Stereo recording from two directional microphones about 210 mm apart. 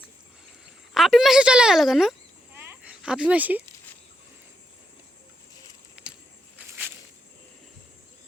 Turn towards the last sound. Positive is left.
turn(degrees=-5)  # may be behind; listen again after turning